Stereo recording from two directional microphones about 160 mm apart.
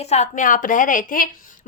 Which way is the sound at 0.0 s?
45° left (ahead or behind).